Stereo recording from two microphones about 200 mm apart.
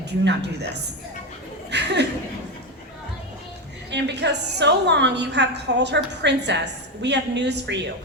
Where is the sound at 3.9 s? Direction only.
60° right (ahead or behind).